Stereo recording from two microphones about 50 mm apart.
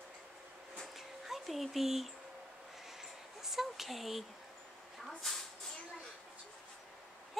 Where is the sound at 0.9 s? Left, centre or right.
Centre.